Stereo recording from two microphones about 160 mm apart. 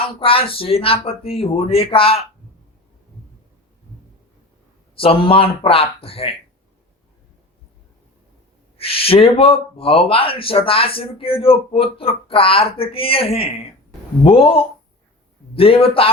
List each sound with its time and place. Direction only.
0.0 s speech: 35° left (ahead or behind)
4.9 s speech: 35° left (ahead or behind)
8.8 s speech: 35° left (ahead or behind)